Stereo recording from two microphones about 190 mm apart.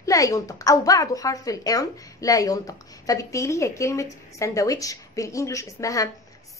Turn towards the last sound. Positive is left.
turn(degrees=15)  # may be behind; listen again after turning